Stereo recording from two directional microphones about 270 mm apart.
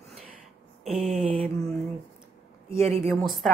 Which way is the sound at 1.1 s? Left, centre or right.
Right.